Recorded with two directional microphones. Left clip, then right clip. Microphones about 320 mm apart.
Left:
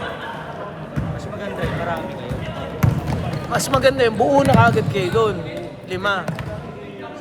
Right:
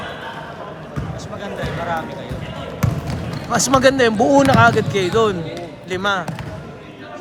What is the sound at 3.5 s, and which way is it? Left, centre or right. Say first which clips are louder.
Speech: right 3 dB; right.